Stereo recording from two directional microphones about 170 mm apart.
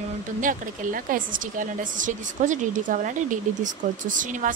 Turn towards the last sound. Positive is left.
turn(degrees=-50)  # may be behind; listen again after turning